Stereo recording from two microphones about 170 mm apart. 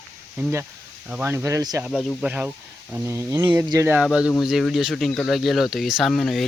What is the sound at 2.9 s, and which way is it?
Speech, 15° right (ahead or behind).